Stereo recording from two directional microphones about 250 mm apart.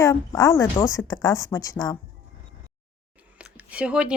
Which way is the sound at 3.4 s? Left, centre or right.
Centre.